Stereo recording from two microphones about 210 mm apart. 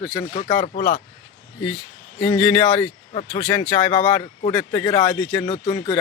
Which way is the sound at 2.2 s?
5° left (ahead or behind).